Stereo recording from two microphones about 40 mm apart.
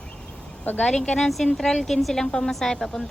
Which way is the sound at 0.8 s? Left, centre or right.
Left.